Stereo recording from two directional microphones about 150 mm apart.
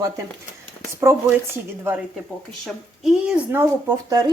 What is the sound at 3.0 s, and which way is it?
Speech, 5° right (ahead or behind).